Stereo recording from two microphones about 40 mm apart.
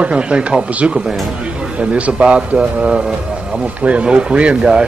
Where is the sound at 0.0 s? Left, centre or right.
Right.